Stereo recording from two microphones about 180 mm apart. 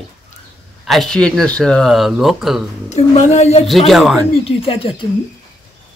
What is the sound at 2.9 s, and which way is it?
Speech, 40° left (ahead or behind).